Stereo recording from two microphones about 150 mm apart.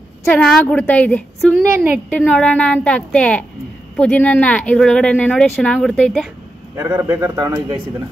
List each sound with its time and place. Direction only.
0.2 s speech: 5° left (ahead or behind)
6.8 s speech: 20° right (ahead or behind)